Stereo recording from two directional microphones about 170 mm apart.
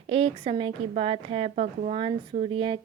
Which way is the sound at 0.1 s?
35° right (ahead or behind).